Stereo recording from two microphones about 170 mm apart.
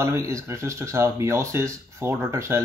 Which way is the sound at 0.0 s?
15° right (ahead or behind).